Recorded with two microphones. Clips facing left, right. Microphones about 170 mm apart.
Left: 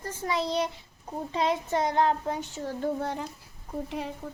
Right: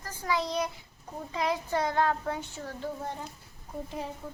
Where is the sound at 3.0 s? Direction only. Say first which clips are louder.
Left 5 dB; 90° left.